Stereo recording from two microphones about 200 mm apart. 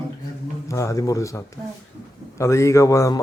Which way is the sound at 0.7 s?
15° left (ahead or behind).